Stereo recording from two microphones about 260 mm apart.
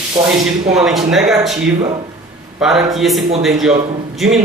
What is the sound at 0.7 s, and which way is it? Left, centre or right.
Speech, centre.